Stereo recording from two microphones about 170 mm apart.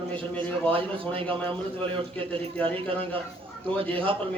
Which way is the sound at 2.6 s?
30° right (ahead or behind).